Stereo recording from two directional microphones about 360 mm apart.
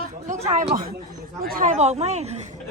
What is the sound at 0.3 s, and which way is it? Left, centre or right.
A woman's voice, centre.